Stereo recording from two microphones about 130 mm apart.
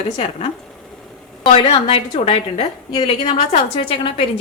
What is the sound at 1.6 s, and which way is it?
A woman's voice, 45° left (ahead or behind).